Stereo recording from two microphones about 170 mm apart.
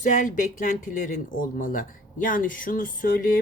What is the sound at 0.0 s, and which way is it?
Speech, 50° left (ahead or behind).